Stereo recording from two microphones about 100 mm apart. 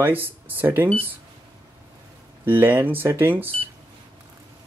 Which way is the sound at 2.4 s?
20° right (ahead or behind).